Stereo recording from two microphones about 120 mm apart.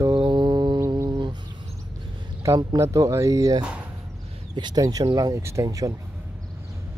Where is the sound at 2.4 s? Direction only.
25° right (ahead or behind).